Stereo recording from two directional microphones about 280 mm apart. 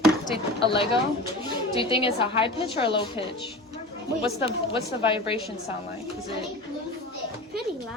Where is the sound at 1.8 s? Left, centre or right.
Centre.